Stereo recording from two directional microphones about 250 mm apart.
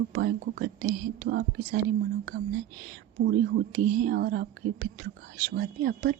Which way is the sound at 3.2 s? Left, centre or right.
Right.